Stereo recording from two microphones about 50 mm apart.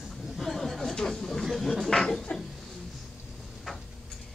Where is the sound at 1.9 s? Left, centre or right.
Centre.